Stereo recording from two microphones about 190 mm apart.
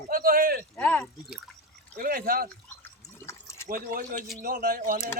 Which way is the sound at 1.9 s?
50° right (ahead or behind).